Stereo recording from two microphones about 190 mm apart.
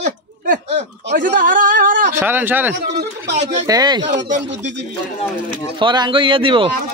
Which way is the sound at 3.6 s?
20° right (ahead or behind).